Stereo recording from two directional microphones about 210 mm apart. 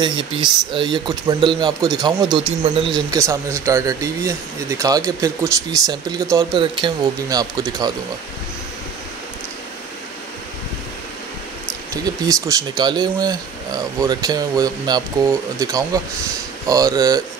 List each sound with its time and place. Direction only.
0.0 s speech: 20° right (ahead or behind)
3.1 s speech: 15° right (ahead or behind)
12.0 s speech: 15° right (ahead or behind)